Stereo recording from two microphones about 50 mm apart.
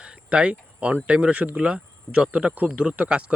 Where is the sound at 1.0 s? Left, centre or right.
Right.